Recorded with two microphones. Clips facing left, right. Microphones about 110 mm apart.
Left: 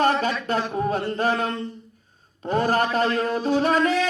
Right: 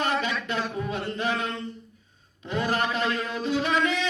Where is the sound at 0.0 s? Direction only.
40° left (ahead or behind).